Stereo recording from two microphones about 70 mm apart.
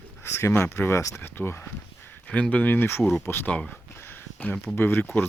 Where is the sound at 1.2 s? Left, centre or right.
Left.